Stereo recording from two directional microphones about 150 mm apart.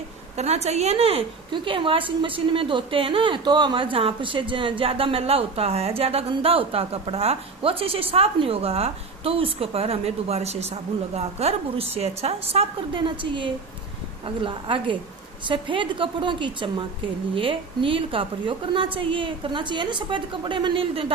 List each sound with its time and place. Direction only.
0.3 s a woman's voice: 45° right (ahead or behind)